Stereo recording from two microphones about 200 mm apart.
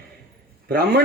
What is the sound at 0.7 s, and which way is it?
Speech, 50° right (ahead or behind).